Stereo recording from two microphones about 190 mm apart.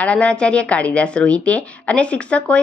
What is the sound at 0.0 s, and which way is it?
Speech, 5° left (ahead or behind).